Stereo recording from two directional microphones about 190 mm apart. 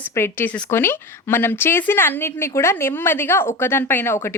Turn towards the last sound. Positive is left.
turn(degrees=10)  # may be behind; listen again after turning